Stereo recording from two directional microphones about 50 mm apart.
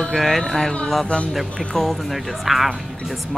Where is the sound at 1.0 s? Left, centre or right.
Centre.